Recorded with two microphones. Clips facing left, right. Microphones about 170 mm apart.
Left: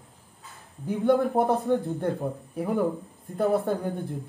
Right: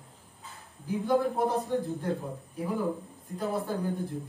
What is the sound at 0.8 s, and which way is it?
Speech, 65° left (ahead or behind).